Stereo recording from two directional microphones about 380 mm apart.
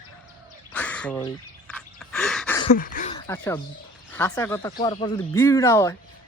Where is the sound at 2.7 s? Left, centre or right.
Left.